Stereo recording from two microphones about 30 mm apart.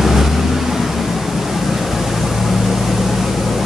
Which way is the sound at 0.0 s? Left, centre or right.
Centre.